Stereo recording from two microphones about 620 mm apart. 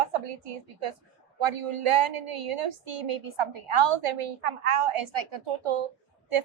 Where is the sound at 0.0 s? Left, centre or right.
Right.